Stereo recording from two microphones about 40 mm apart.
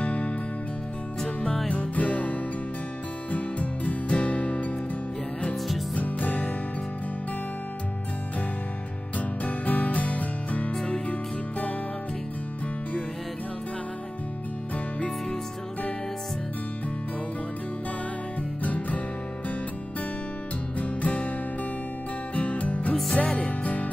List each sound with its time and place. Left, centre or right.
0.0 s music: left
1.7 s music: left
5.9 s music: left
9.4 s music: left
18.6 s music: left
20.8 s music: left
22.3 s music: left